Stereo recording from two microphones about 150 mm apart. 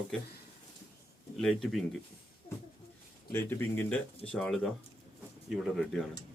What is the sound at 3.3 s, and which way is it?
Speech, 10° left (ahead or behind).